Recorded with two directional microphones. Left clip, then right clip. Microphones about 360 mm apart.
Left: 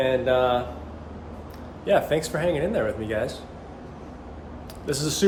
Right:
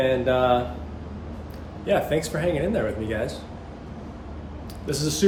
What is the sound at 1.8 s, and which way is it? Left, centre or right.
Speech, centre.